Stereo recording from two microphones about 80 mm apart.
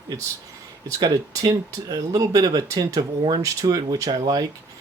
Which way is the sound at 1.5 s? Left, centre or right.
Right.